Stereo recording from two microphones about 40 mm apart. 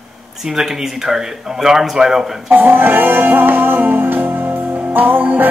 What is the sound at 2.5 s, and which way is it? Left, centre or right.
Music, right.